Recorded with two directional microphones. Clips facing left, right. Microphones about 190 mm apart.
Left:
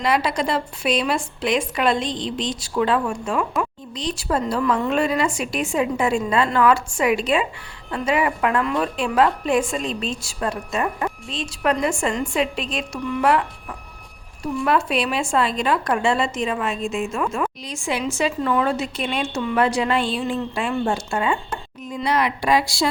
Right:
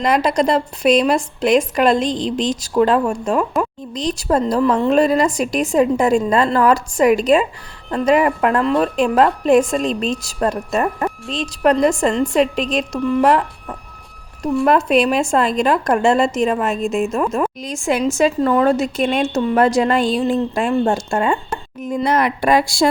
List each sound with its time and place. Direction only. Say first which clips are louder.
0.0 s a woman's voice: right 5 dB; 40° right (ahead or behind)
2.0 s a woman's voice: right 6 dB; centre (ahead or behind)
2.5 s a woman's voice: right 5 dB; 40° right (ahead or behind)